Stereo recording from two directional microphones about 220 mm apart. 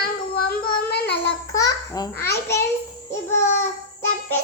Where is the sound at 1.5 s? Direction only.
15° left (ahead or behind).